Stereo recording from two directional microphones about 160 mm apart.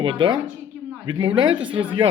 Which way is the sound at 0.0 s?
30° right (ahead or behind).